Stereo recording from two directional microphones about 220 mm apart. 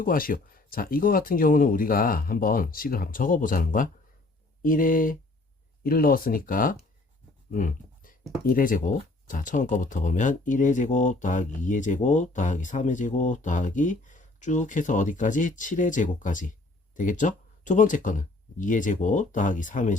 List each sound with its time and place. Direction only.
0.0 s speech: 40° left (ahead or behind)
7.5 s a sound: 35° left (ahead or behind)
8.4 s speech: 40° left (ahead or behind)